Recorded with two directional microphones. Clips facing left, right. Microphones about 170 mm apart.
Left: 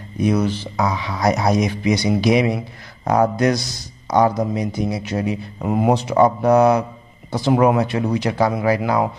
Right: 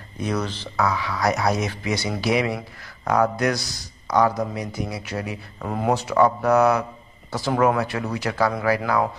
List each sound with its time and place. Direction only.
0.2 s speech: 10° left (ahead or behind)